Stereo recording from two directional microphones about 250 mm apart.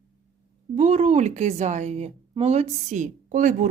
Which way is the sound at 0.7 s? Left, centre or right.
Right.